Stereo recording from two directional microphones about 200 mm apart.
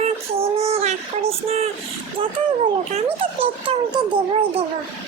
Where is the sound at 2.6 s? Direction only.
30° right (ahead or behind).